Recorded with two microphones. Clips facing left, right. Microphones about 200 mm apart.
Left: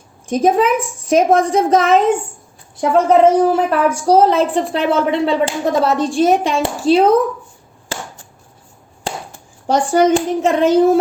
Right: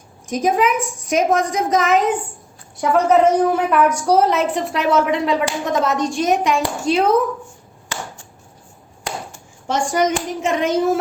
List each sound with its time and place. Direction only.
0.3 s a woman's voice: 30° left (ahead or behind)
9.0 s a child's voice: 35° left (ahead or behind)